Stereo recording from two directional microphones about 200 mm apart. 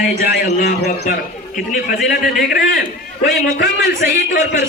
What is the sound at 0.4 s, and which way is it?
Speech, 50° left (ahead or behind).